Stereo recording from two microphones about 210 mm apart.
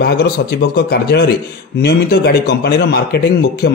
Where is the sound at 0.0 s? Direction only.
50° left (ahead or behind).